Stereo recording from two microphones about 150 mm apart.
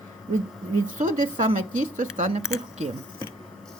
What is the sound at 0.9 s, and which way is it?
Speech, 60° right (ahead or behind).